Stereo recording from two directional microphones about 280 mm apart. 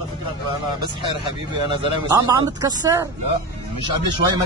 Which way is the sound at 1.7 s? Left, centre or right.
Centre.